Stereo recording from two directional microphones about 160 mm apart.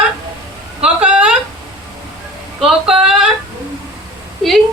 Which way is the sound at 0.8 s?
5° right (ahead or behind).